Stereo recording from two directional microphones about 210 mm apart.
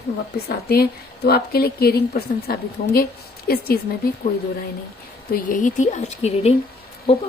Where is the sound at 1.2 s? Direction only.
45° left (ahead or behind).